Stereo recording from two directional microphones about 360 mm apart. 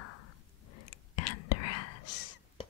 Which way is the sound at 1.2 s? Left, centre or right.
Left.